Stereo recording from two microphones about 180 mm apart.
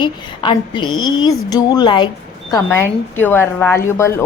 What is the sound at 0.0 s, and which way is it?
A woman's voice, 25° left (ahead or behind).